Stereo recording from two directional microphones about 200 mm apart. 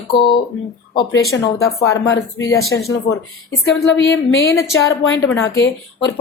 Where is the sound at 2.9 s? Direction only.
75° left (ahead or behind).